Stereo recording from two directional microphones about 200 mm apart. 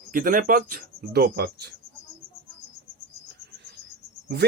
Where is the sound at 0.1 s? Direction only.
45° right (ahead or behind).